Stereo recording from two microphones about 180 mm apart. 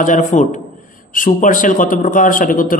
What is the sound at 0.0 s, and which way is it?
Mantra, 45° left (ahead or behind).